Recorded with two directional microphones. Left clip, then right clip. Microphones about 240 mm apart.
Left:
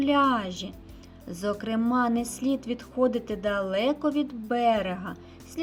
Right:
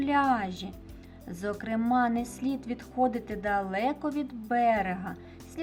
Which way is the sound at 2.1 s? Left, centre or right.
Right.